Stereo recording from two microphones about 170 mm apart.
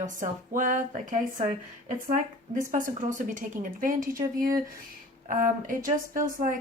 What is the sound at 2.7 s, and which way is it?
Speech, 50° right (ahead or behind).